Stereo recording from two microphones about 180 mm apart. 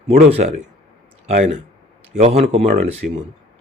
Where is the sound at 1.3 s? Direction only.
35° right (ahead or behind).